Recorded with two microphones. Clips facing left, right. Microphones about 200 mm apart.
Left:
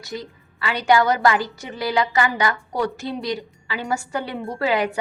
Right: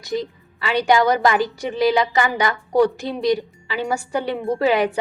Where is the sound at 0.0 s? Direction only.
15° right (ahead or behind).